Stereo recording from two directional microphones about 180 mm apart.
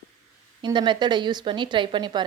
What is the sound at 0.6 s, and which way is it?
A woman's voice, 25° right (ahead or behind).